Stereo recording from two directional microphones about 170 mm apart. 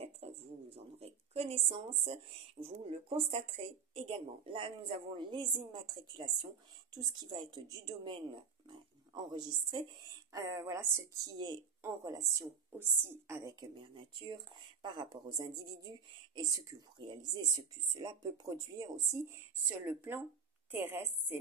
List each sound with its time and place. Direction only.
0.0 s a woman's voice: 35° right (ahead or behind); by 21.4 s 10° right (ahead or behind)